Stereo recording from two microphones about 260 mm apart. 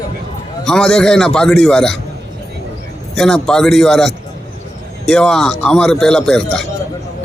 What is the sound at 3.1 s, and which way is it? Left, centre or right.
Speech, centre.